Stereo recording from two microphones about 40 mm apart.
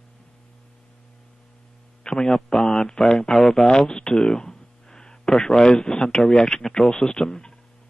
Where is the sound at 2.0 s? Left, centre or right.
Centre.